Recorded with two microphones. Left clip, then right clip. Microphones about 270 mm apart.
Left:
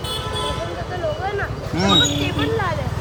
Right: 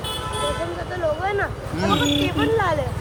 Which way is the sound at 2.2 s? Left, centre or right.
Right.